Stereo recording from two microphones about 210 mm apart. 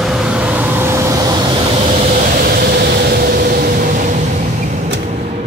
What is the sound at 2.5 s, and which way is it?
Vehicle, 45° right (ahead or behind).